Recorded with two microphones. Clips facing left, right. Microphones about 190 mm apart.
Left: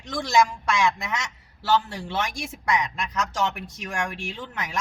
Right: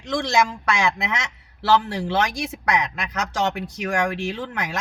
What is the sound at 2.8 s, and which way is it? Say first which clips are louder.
Speech: right 2 dB; 75° right (ahead or behind).